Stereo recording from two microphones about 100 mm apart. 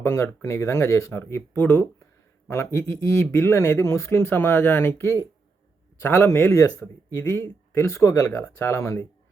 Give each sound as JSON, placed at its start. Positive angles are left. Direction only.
{"t": 0.0, "sound": "speech", "side_deg": 25}